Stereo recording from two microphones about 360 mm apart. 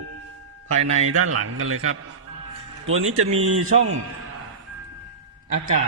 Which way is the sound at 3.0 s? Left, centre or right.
Right.